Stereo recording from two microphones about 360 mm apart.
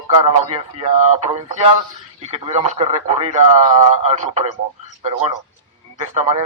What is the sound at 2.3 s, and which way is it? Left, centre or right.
A man's voice, centre.